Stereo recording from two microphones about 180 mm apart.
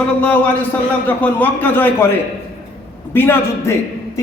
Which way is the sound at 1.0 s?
10° left (ahead or behind).